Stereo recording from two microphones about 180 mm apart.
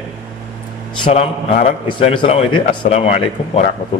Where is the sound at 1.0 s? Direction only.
30° left (ahead or behind).